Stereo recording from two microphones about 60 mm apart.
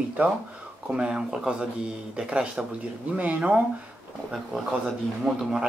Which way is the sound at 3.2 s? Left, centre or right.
Right.